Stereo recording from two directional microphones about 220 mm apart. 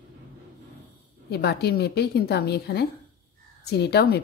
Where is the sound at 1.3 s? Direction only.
45° left (ahead or behind).